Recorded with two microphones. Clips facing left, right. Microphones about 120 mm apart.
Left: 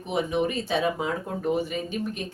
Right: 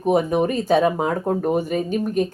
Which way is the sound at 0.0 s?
45° right (ahead or behind).